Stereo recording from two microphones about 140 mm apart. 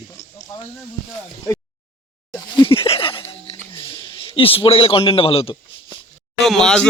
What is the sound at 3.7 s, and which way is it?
A man's voice, 40° left (ahead or behind).